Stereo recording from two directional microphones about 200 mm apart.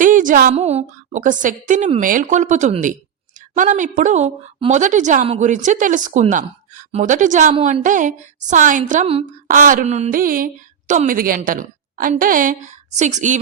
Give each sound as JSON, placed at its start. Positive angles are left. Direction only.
{"t": 0.0, "sound": "a woman's voice", "side_deg": -40}